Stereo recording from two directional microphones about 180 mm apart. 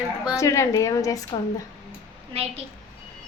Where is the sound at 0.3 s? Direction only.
15° left (ahead or behind).